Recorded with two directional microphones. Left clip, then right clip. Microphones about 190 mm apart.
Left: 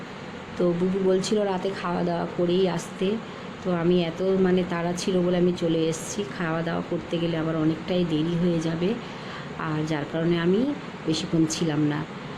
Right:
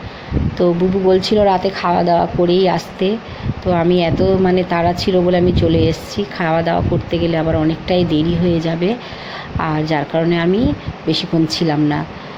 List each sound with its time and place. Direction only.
0.6 s speech: 15° right (ahead or behind)